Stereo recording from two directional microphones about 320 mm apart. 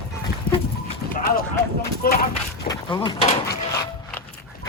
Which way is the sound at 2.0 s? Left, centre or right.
Left.